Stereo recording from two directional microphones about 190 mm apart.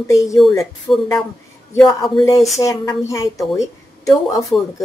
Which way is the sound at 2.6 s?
15° left (ahead or behind).